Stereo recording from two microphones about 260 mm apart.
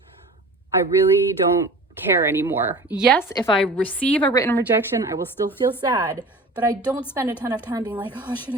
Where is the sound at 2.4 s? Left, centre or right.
Centre.